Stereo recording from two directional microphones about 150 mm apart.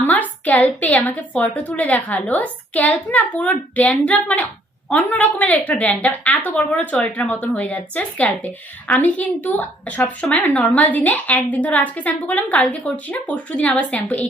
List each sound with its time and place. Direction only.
0.0 s a woman's voice: 10° left (ahead or behind)